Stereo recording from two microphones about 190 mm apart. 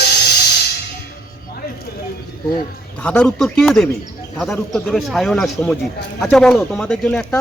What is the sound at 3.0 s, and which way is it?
Speech, 5° left (ahead or behind).